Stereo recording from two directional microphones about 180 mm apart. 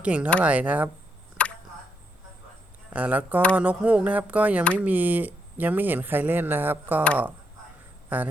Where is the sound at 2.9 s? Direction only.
10° right (ahead or behind).